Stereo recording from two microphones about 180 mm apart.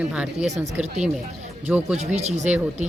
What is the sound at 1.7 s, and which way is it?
Speech, 10° right (ahead or behind).